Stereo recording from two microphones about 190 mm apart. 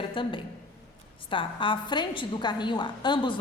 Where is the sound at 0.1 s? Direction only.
25° left (ahead or behind).